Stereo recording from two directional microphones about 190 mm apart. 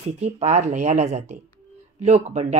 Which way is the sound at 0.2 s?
35° right (ahead or behind).